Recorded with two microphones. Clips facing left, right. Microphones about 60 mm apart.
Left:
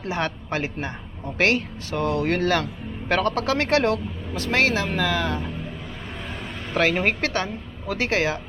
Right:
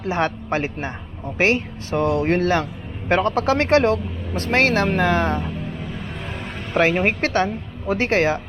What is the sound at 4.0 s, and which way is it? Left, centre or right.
Speech, right.